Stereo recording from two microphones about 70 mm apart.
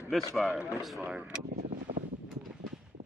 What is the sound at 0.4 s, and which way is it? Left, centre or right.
Speech, centre.